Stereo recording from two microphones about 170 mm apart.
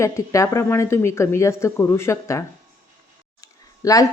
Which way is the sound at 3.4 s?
20° left (ahead or behind).